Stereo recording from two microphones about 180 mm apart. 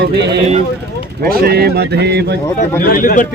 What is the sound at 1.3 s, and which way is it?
A man's voice, 60° right (ahead or behind).